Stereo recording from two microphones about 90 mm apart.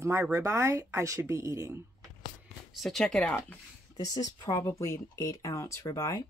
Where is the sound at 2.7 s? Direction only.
5° left (ahead or behind).